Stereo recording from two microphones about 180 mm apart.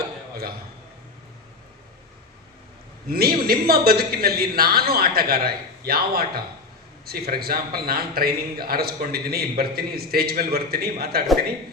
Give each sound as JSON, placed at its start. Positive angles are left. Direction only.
{"t": 3.1, "sound": "a man's voice", "side_deg": -55}